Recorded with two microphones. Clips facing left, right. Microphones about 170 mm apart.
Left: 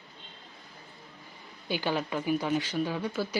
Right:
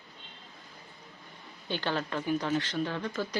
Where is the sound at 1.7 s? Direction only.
10° left (ahead or behind).